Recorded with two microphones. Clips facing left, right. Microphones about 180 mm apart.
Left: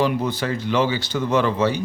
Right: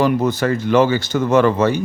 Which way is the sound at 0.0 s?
45° right (ahead or behind).